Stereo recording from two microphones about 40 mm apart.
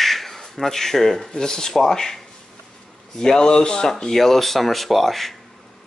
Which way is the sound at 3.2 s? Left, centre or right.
Centre.